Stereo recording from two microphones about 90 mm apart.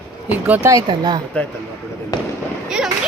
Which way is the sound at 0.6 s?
35° right (ahead or behind).